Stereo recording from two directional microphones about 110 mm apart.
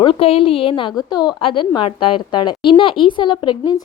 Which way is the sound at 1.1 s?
40° left (ahead or behind).